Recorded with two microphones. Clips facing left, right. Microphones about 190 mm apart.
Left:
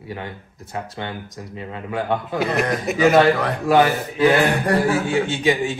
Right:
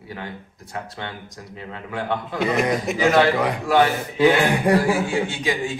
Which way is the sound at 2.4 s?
Centre (ahead or behind).